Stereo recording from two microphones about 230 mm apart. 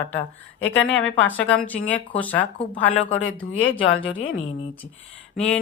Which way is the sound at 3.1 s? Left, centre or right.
Left.